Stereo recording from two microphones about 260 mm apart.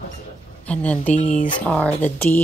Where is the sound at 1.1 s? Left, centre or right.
Left.